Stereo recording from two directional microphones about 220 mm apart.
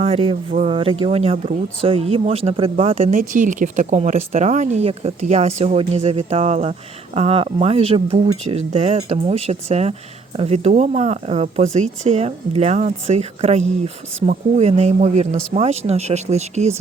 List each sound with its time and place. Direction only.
0.0 s speech: 25° right (ahead or behind)
3.1 s speech: 35° right (ahead or behind)